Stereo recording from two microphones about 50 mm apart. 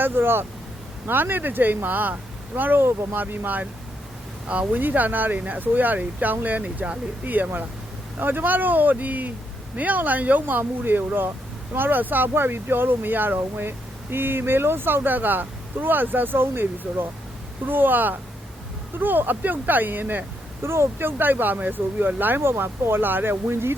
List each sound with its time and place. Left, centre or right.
0.0 s speech: right
20.6 s speech: right
22.4 s speech: right